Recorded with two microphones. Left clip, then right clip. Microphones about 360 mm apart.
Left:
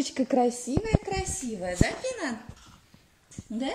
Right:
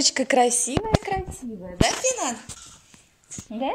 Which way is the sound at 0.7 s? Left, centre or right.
Right.